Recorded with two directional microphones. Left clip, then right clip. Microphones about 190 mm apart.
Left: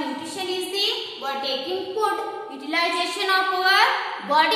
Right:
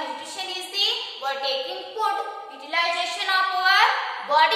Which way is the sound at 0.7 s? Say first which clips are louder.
Right 4 dB; 10° right (ahead or behind).